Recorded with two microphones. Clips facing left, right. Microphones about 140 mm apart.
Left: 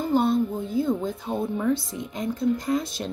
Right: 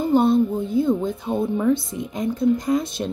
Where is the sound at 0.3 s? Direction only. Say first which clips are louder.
Right 5 dB; 20° right (ahead or behind).